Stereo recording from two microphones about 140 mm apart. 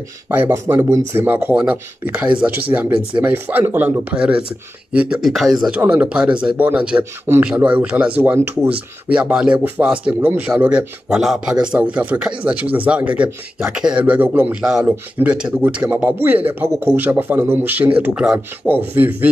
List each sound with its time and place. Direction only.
0.3 s speech: 15° right (ahead or behind)